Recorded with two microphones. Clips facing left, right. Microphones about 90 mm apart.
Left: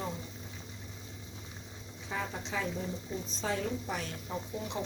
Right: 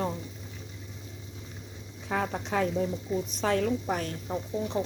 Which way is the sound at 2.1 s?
55° right (ahead or behind).